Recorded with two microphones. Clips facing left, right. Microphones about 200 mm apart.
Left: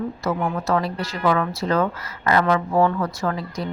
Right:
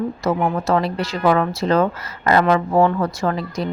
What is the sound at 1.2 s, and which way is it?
Speech, 25° right (ahead or behind).